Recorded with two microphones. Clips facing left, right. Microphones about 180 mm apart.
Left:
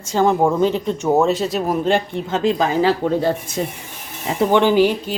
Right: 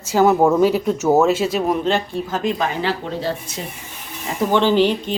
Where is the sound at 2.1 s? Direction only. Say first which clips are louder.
Left 3 dB; 25° left (ahead or behind).